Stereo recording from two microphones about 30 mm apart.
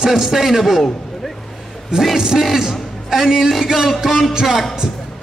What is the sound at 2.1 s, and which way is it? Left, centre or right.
A man's voice, centre.